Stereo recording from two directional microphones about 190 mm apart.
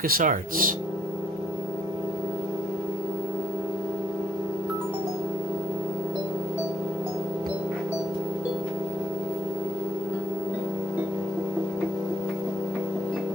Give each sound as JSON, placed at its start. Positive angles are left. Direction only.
{"t": 0.0, "sound": "speech", "side_deg": -45}